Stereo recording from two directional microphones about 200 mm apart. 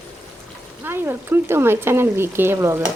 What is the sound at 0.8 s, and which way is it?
Speech, 10° right (ahead or behind).